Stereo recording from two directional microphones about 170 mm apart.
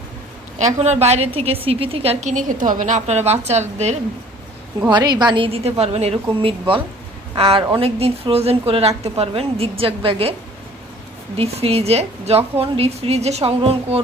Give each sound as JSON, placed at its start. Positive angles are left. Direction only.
{"t": 0.6, "sound": "a woman's voice", "side_deg": -40}
{"t": 4.9, "sound": "a woman's voice", "side_deg": -25}
{"t": 11.3, "sound": "a woman's voice", "side_deg": -35}